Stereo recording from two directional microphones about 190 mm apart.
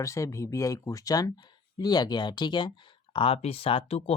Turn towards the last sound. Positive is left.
turn(degrees=30)  # may be behind; listen again after turning